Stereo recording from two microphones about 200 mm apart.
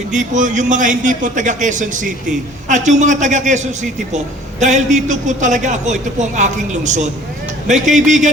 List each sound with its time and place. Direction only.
0.1 s a man's voice: 40° right (ahead or behind)